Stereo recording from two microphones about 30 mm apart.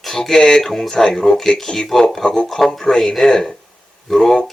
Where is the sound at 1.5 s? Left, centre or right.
Centre.